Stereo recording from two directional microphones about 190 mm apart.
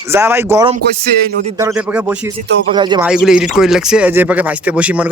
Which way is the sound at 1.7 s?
5° right (ahead or behind).